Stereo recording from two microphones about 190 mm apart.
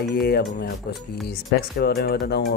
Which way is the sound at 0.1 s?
55° left (ahead or behind).